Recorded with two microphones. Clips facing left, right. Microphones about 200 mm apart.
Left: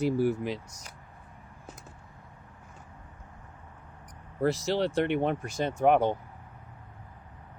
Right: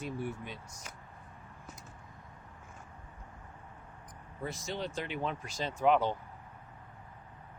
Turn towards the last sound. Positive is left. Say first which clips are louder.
# left 5 dB
turn(degrees=55)  # may be behind; listen again after turning